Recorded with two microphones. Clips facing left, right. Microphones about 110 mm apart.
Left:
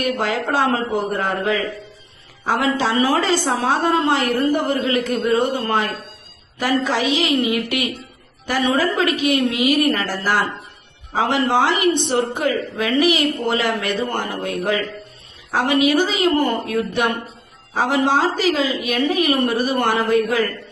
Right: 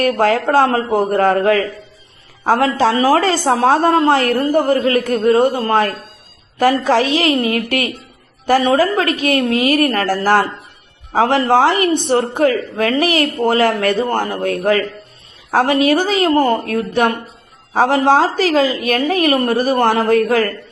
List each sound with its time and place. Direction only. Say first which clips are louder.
0.0 s a woman's voice: right 7 dB; 50° right (ahead or behind)
7.2 s a woman's voice: right 3 dB; 40° right (ahead or behind)